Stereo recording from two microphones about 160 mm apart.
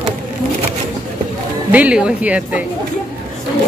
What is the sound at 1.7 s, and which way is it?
Speech, 10° right (ahead or behind).